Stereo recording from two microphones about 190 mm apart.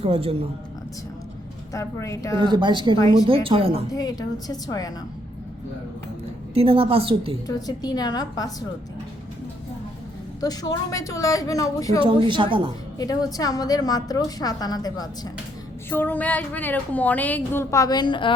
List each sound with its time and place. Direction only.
0.0 s a woman's voice: 30° right (ahead or behind)
1.7 s a woman's voice: 15° left (ahead or behind)
2.4 s a woman's voice: 25° right (ahead or behind)
3.8 s a woman's voice: 20° left (ahead or behind)
6.5 s a woman's voice: 30° right (ahead or behind)
7.4 s a woman's voice: 20° left (ahead or behind)
10.4 s a woman's voice: 20° left (ahead or behind)
11.9 s a woman's voice: 25° right (ahead or behind)
13.0 s a woman's voice: 20° left (ahead or behind)
15.9 s a woman's voice: 10° left (ahead or behind); by 18.3 s 25° left (ahead or behind)